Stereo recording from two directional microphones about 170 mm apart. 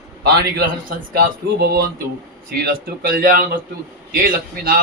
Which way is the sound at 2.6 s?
65° right (ahead or behind).